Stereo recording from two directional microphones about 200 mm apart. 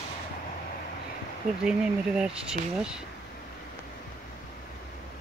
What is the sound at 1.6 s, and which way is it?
Speech, 5° right (ahead or behind).